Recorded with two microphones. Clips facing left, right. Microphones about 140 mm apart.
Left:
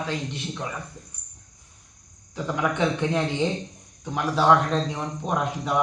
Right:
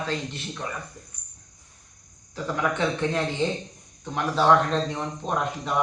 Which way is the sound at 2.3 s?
15° left (ahead or behind).